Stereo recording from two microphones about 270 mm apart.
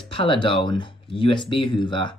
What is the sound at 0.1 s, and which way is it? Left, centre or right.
Speech, centre.